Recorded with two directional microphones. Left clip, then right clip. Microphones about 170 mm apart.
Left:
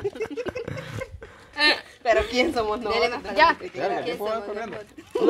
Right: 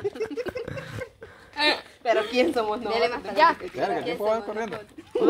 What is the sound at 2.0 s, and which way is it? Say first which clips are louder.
Speech: even; 40° left (ahead or behind).